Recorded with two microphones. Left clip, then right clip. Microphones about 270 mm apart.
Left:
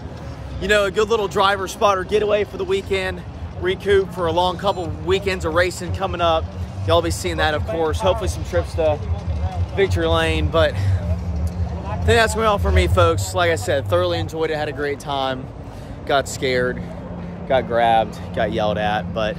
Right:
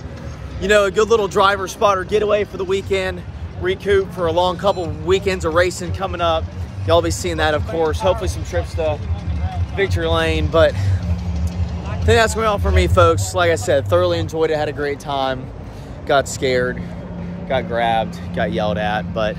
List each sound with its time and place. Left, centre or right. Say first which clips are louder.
0.6 s speech: right 3 dB; centre
12.1 s speech: right 1 dB; centre